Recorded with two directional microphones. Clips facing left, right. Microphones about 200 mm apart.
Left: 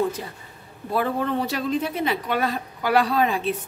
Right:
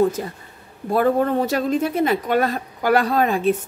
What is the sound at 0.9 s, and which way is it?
Speech, 45° right (ahead or behind).